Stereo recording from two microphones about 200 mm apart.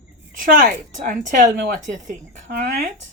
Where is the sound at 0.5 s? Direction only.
40° right (ahead or behind).